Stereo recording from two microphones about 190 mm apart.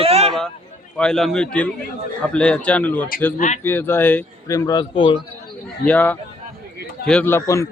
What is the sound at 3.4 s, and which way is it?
Speech, 40° left (ahead or behind).